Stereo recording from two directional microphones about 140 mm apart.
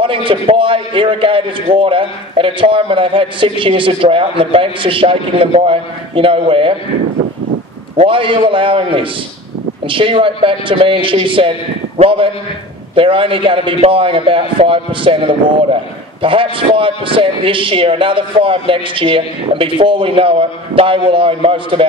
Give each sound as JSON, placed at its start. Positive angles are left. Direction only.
{"t": 0.0, "sound": "a man's voice", "side_deg": -40}
{"t": 8.0, "sound": "a man's voice", "side_deg": -40}